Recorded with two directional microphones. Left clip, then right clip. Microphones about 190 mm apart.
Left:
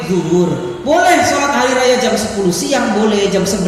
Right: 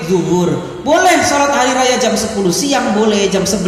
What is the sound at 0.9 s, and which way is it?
A woman's voice, 40° right (ahead or behind).